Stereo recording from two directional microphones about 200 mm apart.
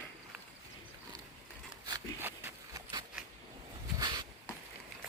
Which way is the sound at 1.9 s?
15° right (ahead or behind).